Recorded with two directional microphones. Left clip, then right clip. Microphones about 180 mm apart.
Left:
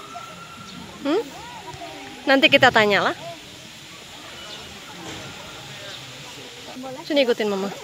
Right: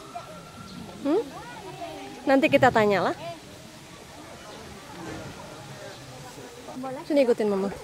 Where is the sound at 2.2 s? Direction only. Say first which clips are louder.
Left 5 dB; 5° right (ahead or behind).